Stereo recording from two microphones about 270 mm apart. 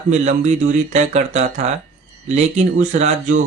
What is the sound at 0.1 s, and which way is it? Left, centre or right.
Speech, right.